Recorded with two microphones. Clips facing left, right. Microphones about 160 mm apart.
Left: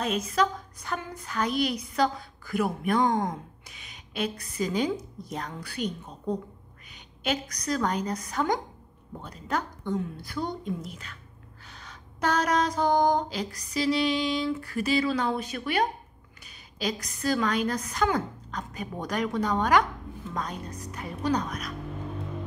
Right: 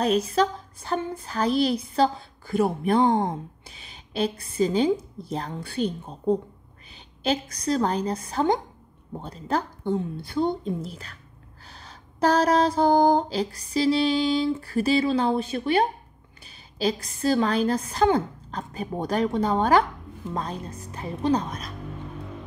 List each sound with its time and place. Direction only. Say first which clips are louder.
0.0 s a woman's voice: right 5 dB; 35° right (ahead or behind)
11.6 s a sound: right 2 dB; 30° right (ahead or behind)
16.4 s a woman's voice: right 6 dB; 30° right (ahead or behind)